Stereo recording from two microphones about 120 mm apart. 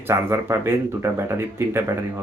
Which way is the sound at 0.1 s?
25° right (ahead or behind).